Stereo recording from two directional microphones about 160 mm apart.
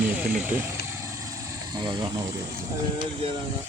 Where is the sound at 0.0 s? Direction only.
10° right (ahead or behind).